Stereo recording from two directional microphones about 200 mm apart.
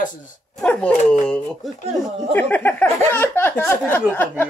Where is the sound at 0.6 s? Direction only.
5° left (ahead or behind).